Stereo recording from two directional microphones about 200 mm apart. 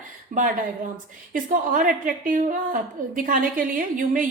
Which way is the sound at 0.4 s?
40° right (ahead or behind).